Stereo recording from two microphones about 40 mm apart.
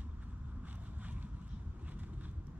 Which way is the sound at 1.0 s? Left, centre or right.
Right.